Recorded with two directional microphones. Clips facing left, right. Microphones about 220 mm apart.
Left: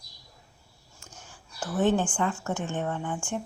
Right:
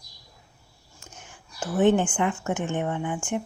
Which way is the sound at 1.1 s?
20° right (ahead or behind).